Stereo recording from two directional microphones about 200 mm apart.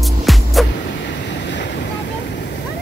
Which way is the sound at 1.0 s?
60° left (ahead or behind).